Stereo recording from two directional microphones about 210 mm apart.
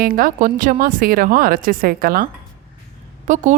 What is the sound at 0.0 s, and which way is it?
Speech, 40° right (ahead or behind).